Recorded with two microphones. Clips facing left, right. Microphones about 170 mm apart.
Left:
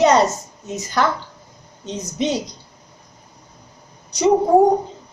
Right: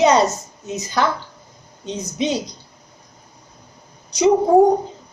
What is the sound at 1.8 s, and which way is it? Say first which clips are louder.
Speech: even; 10° right (ahead or behind).